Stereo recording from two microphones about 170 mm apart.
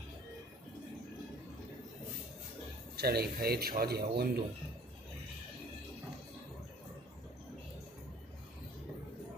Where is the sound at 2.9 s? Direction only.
70° right (ahead or behind).